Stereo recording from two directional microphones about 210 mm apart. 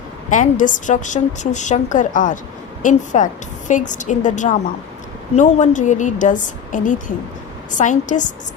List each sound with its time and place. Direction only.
0.3 s a woman's voice: 40° left (ahead or behind)